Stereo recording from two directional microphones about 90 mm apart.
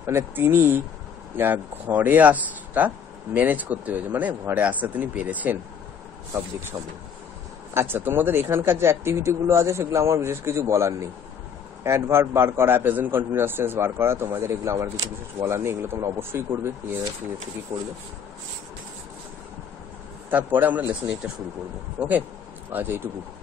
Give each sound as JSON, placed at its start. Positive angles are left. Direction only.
{"t": 0.0, "sound": "speech", "side_deg": -30}
{"t": 7.7, "sound": "speech", "side_deg": -25}
{"t": 17.7, "sound": "speech", "side_deg": -70}
{"t": 20.2, "sound": "speech", "side_deg": -20}
{"t": 22.0, "sound": "speech", "side_deg": -15}